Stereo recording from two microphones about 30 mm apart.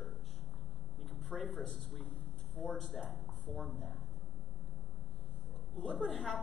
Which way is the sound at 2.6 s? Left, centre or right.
Left.